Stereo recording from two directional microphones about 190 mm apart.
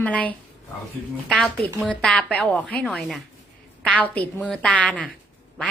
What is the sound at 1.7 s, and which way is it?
A woman's voice, 5° left (ahead or behind).